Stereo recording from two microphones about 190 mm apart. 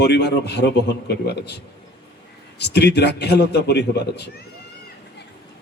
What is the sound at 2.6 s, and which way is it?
A man's voice, 60° left (ahead or behind).